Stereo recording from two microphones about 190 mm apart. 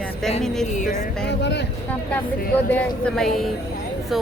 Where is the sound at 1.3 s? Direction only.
65° left (ahead or behind).